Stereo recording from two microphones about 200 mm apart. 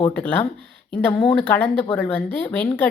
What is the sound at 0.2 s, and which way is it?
A woman's voice, 10° left (ahead or behind).